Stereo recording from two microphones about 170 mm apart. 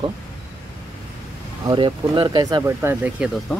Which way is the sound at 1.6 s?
30° right (ahead or behind).